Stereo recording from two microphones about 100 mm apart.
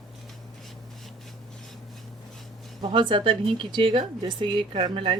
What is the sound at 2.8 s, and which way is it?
Speech, 50° right (ahead or behind).